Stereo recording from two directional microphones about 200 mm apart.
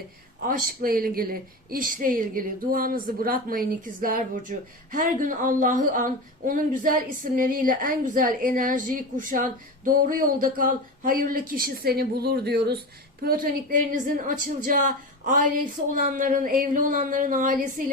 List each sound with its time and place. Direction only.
0.4 s a woman's voice: 45° right (ahead or behind)